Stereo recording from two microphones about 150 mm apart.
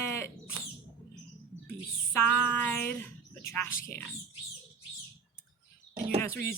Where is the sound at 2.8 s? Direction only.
15° left (ahead or behind).